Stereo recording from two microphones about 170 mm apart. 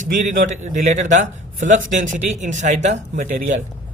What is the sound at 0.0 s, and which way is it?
A man's voice, 45° right (ahead or behind).